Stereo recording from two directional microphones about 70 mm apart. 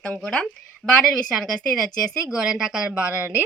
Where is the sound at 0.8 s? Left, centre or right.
Centre.